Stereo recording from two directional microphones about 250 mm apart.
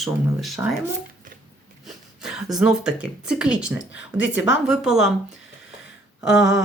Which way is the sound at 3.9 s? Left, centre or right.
Left.